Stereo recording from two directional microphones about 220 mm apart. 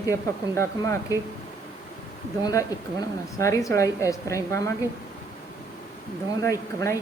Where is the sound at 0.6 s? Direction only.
15° left (ahead or behind).